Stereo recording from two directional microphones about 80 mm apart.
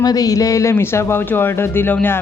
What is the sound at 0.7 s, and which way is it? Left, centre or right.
Speech, left.